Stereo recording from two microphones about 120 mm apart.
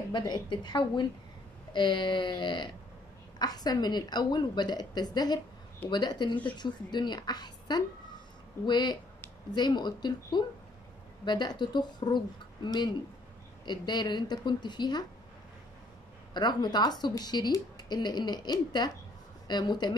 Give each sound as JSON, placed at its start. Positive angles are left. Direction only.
{"t": 0.1, "sound": "speech", "side_deg": 40}
{"t": 16.3, "sound": "speech", "side_deg": 35}